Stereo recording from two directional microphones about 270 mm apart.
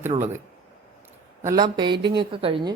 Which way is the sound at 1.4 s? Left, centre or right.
Centre.